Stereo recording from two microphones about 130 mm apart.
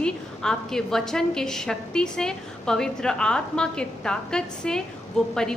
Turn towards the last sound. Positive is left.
turn(degrees=5)  # may be behind; listen again after turning